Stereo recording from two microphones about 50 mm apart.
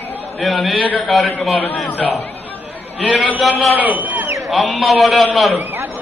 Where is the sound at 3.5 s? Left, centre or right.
Right.